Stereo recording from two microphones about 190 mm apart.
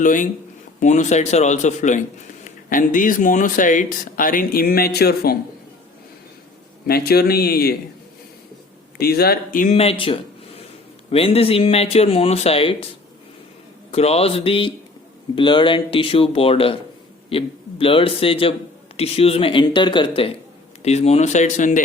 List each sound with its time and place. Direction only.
0.0 s speech: 45° left (ahead or behind)
6.8 s speech: 55° left (ahead or behind)
9.0 s speech: 55° left (ahead or behind); by 12.7 s 30° left (ahead or behind)
13.9 s a man's voice: 35° left (ahead or behind)